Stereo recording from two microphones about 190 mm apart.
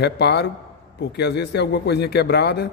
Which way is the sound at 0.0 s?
60° left (ahead or behind).